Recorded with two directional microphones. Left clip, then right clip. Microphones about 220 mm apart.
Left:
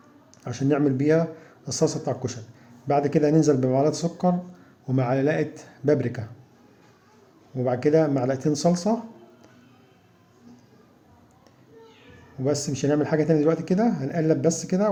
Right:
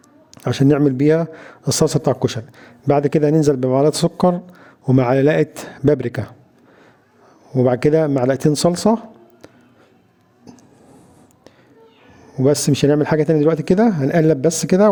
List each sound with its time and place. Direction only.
0.3 s a man's voice: 50° right (ahead or behind)
7.5 s a man's voice: 50° right (ahead or behind)
12.4 s a man's voice: 50° right (ahead or behind)